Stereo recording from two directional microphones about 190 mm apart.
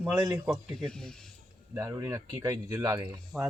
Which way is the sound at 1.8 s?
15° right (ahead or behind).